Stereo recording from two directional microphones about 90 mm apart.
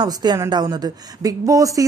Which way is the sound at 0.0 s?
50° right (ahead or behind).